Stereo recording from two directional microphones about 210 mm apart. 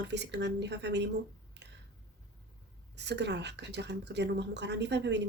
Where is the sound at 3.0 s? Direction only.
55° right (ahead or behind).